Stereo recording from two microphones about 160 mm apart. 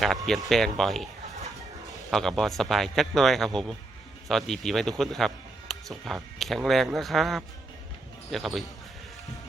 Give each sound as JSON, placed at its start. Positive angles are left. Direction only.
{"t": 0.0, "sound": "speech", "side_deg": 0}